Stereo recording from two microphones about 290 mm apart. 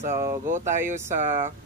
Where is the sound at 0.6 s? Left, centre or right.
Centre.